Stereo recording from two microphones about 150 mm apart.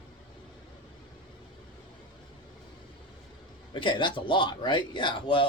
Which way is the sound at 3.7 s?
35° left (ahead or behind).